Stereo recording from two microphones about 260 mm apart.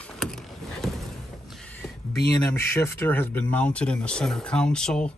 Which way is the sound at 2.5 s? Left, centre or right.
Centre.